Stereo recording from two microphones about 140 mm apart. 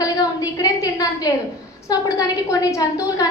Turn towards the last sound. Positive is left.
turn(degrees=25)  # may be behind; listen again after turning